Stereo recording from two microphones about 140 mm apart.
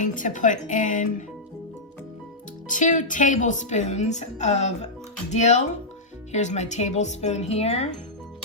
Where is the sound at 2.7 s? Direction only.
65° left (ahead or behind); by 7.9 s 50° left (ahead or behind).